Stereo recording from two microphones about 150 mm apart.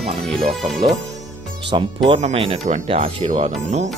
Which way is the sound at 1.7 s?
30° right (ahead or behind).